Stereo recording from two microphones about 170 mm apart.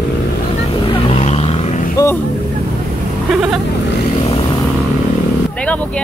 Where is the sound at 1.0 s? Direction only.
40° left (ahead or behind).